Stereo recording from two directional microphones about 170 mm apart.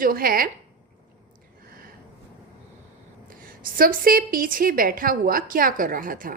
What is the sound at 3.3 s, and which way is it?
A woman's voice, 55° right (ahead or behind).